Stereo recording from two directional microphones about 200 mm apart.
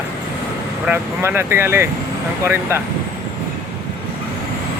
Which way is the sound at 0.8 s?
10° right (ahead or behind).